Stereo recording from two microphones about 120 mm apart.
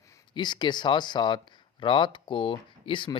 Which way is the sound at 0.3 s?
40° left (ahead or behind).